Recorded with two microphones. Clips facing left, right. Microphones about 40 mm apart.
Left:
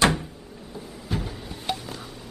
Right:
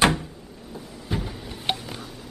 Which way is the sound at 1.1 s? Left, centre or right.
Centre.